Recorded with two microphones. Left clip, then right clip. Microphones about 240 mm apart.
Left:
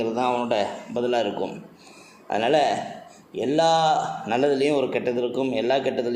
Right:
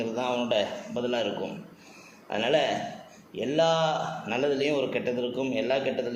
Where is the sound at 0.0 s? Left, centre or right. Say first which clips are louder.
Left 5 dB; left.